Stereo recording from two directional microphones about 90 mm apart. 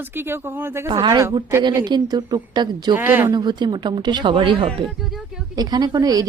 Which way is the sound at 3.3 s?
55° right (ahead or behind).